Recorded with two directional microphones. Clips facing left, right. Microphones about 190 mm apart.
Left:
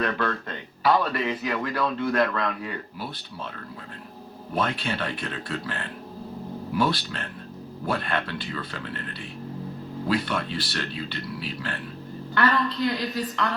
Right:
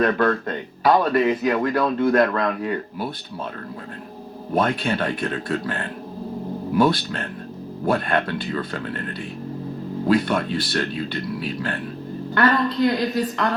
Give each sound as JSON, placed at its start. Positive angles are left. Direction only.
{"t": 0.0, "sound": "speech", "side_deg": -50}
{"t": 4.5, "sound": "speech", "side_deg": -50}
{"t": 10.1, "sound": "speech", "side_deg": -50}